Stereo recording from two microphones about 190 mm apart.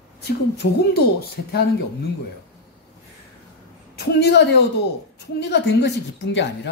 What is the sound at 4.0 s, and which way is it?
Speech, 60° left (ahead or behind).